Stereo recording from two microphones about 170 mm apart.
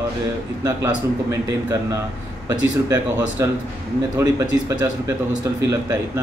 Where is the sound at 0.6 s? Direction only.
20° right (ahead or behind).